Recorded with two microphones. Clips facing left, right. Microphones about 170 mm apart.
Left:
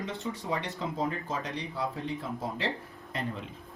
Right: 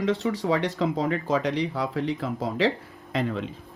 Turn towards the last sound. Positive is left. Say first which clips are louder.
# right 8 dB
turn(degrees=-90)